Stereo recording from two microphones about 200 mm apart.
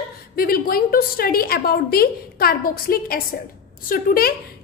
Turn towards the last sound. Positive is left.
turn(degrees=45)  # may be behind; listen again after turning